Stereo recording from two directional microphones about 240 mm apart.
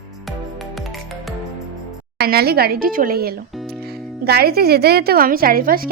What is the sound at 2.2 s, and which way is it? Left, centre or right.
A woman's voice, right.